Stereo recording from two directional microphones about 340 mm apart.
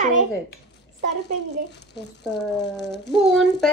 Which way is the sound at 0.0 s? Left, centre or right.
Right.